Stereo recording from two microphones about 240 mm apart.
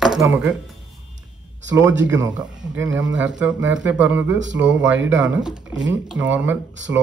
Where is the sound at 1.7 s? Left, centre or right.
Centre.